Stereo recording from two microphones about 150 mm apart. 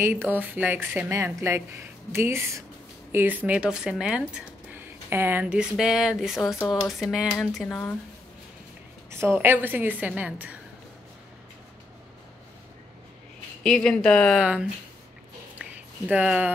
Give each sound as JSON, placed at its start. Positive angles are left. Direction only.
{"t": 0.0, "sound": "a woman's voice", "side_deg": -15}
{"t": 9.1, "sound": "a woman's voice", "side_deg": -15}
{"t": 13.7, "sound": "speech", "side_deg": 5}
{"t": 14.4, "sound": "a woman's voice", "side_deg": -5}
{"t": 15.6, "sound": "a sound", "side_deg": -10}